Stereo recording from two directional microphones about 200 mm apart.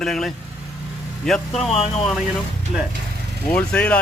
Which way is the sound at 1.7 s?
30° left (ahead or behind).